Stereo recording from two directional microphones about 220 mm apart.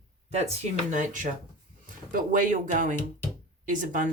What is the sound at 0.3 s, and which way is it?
Speech, 30° right (ahead or behind).